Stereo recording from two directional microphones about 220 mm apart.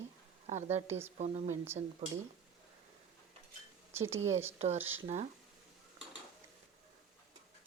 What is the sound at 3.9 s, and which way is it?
Speech, 10° right (ahead or behind).